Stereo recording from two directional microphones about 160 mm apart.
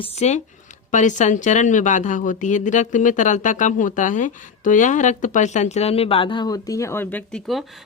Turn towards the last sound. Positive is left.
turn(degrees=0)  # may be behind; listen again after turning